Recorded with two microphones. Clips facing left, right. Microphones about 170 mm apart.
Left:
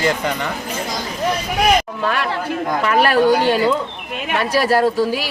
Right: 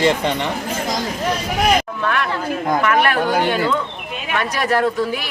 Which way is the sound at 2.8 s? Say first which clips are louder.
Left 2 dB; 35° left (ahead or behind).